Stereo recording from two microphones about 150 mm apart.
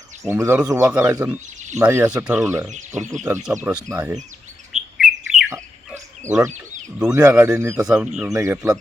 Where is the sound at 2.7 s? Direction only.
55° right (ahead or behind).